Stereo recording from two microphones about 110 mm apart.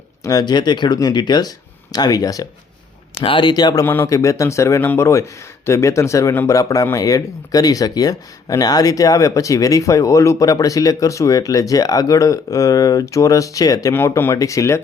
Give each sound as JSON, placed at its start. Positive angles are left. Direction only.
{"t": 0.2, "sound": "speech", "side_deg": 35}
{"t": 3.2, "sound": "speech", "side_deg": 45}
{"t": 3.8, "sound": "a man's voice", "side_deg": 25}
{"t": 13.9, "sound": "a man's voice", "side_deg": 20}